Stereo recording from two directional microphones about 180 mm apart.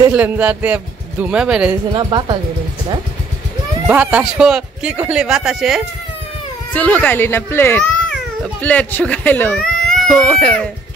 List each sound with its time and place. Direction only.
0.1 s a man's voice: 10° right (ahead or behind)
2.0 s speech: 25° right (ahead or behind)
3.8 s speech: 5° right (ahead or behind)